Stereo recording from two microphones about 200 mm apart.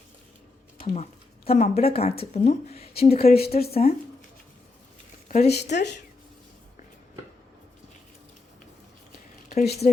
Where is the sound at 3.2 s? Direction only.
50° left (ahead or behind).